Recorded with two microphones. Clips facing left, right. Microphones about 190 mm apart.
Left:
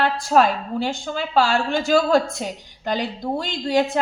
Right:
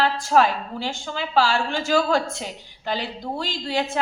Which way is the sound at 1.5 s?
40° left (ahead or behind).